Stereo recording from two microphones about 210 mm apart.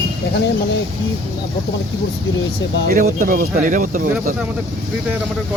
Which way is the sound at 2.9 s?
45° right (ahead or behind).